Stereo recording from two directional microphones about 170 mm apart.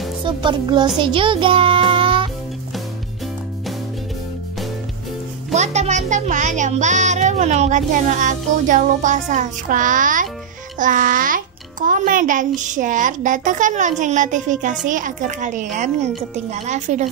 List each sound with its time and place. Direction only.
0.2 s music: 30° right (ahead or behind)
5.5 s music: 40° right (ahead or behind)